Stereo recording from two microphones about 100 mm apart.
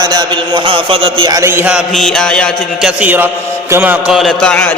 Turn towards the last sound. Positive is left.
turn(degrees=10)  # may be behind; listen again after turning